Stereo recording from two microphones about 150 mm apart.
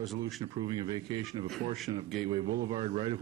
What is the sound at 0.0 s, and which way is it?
Speech, centre (ahead or behind).